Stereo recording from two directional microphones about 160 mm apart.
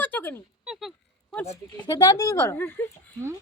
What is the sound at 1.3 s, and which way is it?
A woman's voice, 15° left (ahead or behind).